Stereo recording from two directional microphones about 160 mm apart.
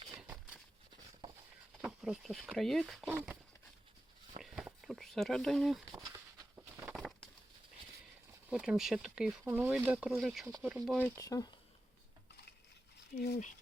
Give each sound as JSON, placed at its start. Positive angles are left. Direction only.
{"t": 0.2, "sound": "a sound", "side_deg": -10}
{"t": 1.8, "sound": "speech", "side_deg": -5}
{"t": 3.1, "sound": "speech", "side_deg": -10}
{"t": 4.4, "sound": "a sound", "side_deg": 0}
{"t": 6.1, "sound": "a sound", "side_deg": -25}
{"t": 6.9, "sound": "bird", "side_deg": 0}
{"t": 8.4, "sound": "speech", "side_deg": -5}
{"t": 10.9, "sound": "speech", "side_deg": 10}
{"t": 11.2, "sound": "speech", "side_deg": 20}
{"t": 13.1, "sound": "speech", "side_deg": 90}